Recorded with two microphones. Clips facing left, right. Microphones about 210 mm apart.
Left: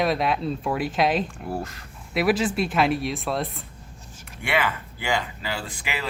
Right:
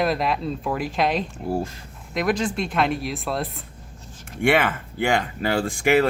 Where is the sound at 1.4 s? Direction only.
25° right (ahead or behind).